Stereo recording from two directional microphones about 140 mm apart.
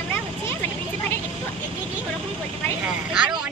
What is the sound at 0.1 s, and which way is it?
Vehicle, 15° left (ahead or behind).